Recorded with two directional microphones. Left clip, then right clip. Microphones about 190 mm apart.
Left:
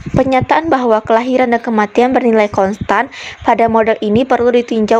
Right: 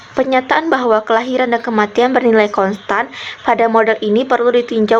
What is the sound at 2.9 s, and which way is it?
Speech, 50° left (ahead or behind).